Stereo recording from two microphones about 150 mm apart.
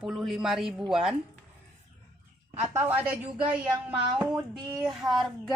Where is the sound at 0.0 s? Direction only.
Centre (ahead or behind).